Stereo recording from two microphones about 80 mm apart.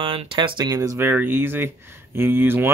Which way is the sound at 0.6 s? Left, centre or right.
Right.